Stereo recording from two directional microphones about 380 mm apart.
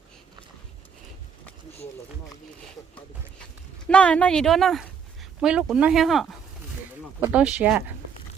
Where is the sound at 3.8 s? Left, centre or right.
Centre.